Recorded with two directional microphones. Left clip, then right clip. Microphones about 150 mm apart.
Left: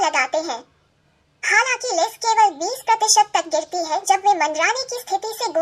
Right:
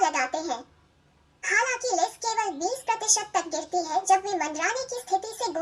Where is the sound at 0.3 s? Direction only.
25° left (ahead or behind).